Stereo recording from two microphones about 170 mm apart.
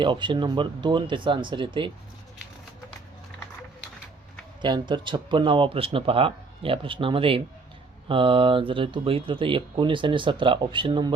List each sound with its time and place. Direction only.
0.0 s speech: 25° right (ahead or behind)
4.6 s speech: 30° right (ahead or behind)